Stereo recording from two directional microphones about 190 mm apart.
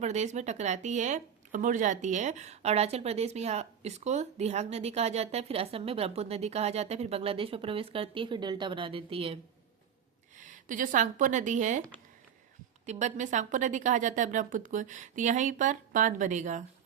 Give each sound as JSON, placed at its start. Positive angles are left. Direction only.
{"t": 0.0, "sound": "speech", "side_deg": -35}
{"t": 10.3, "sound": "speech", "side_deg": -40}
{"t": 12.8, "sound": "speech", "side_deg": -40}